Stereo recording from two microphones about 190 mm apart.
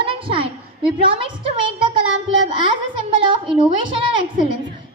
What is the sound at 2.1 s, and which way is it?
Child singing, 85° right.